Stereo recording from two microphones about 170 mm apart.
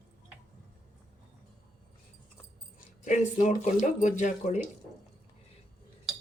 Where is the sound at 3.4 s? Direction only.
45° left (ahead or behind).